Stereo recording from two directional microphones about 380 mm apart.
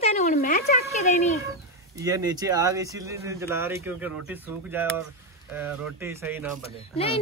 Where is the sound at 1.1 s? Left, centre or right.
Centre.